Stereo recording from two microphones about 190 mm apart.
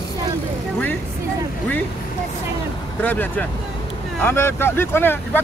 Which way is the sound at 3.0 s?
10° left (ahead or behind).